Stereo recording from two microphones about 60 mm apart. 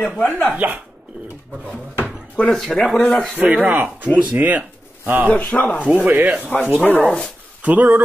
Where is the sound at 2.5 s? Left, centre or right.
Centre.